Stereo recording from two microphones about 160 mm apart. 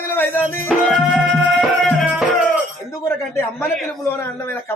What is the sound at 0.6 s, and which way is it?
Music, 5° right (ahead or behind).